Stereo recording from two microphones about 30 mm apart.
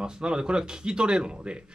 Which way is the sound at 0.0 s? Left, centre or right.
Right.